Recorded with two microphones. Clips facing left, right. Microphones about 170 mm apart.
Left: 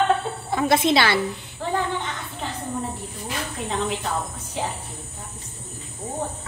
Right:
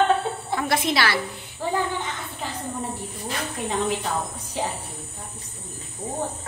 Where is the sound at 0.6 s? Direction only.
25° left (ahead or behind).